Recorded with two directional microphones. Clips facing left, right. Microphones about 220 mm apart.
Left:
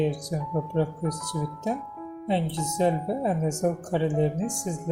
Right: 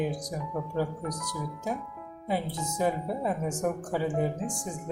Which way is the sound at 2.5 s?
70° left (ahead or behind).